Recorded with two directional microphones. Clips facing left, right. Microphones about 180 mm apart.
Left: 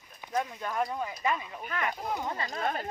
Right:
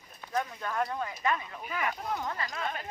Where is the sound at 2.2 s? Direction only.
25° left (ahead or behind).